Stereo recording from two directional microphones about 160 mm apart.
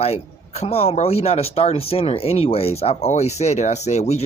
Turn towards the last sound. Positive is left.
turn(degrees=45)  # may be behind; listen again after turning